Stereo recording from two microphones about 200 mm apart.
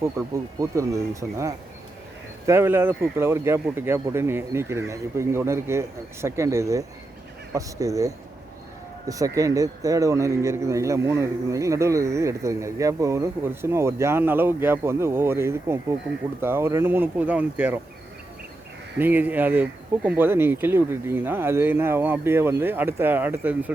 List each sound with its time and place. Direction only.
0.0 s speech: 15° right (ahead or behind)
18.9 s speech: 10° right (ahead or behind)